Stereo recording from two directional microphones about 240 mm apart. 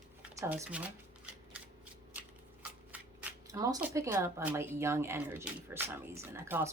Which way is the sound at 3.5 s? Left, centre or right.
Centre.